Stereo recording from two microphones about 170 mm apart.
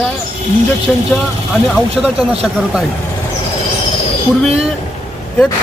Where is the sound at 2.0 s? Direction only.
5° right (ahead or behind).